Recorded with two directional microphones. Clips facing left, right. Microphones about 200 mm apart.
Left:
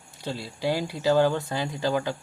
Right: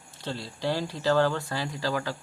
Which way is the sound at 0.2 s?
10° left (ahead or behind).